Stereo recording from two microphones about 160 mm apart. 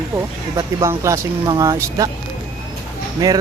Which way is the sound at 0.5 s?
20° right (ahead or behind).